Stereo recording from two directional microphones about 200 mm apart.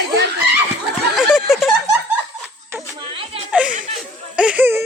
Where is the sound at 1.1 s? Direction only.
5° right (ahead or behind).